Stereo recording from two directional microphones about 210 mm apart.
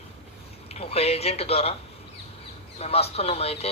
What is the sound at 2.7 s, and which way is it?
Speech, 30° left (ahead or behind).